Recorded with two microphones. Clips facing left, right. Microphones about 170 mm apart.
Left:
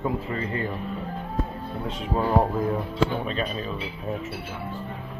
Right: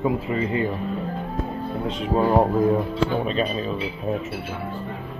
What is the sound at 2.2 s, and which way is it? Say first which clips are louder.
Speech: right 4 dB; 20° right (ahead or behind).